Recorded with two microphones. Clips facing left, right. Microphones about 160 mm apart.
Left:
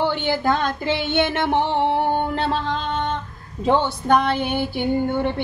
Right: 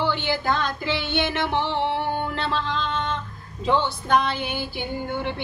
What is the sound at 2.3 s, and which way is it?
Music, 50° left (ahead or behind).